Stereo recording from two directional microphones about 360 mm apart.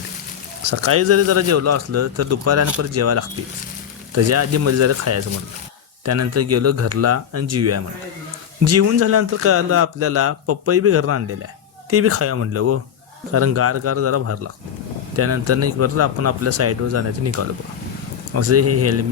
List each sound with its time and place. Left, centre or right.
0.6 s speech: right